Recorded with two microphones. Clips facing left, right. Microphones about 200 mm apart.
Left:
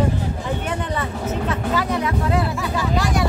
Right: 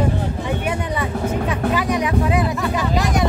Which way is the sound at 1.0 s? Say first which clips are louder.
Right 3 dB; 15° right (ahead or behind).